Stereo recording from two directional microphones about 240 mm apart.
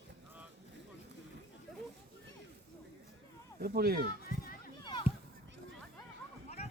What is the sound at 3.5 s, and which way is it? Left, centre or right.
Speech, right.